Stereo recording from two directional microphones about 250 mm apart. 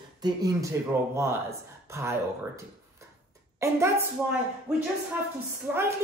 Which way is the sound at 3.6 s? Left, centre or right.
Centre.